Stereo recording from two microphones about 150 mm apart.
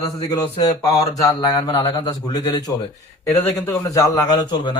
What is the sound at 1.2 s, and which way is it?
A man's voice, 25° left (ahead or behind).